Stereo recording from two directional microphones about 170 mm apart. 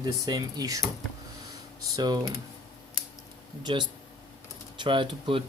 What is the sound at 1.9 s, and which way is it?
Speech, 25° right (ahead or behind).